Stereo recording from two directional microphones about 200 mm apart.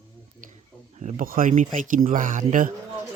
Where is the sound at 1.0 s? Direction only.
35° right (ahead or behind).